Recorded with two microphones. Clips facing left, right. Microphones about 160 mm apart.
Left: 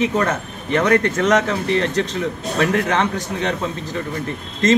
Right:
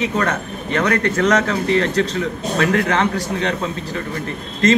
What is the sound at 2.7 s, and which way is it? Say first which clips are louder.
Speech: right 1 dB; 15° left (ahead or behind).